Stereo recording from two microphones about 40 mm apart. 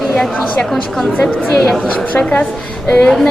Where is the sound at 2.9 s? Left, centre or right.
Left.